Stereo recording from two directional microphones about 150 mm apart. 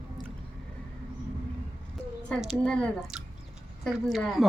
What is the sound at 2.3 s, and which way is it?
Speech, centre (ahead or behind).